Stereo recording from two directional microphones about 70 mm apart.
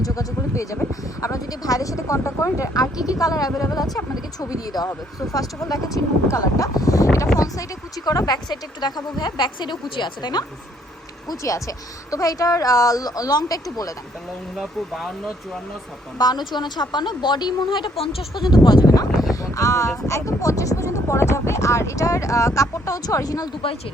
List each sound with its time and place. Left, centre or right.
0.0 s speech: left
2.7 s speech: left
8.4 s speech: left
11.3 s speech: left
14.5 s speech: centre
16.1 s speech: left
16.6 s speech: left
18.5 s speech: left
19.3 s speech: left